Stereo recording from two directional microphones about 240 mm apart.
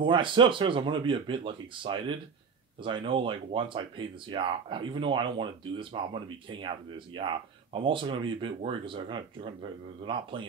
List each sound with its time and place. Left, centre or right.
0.0 s speech: right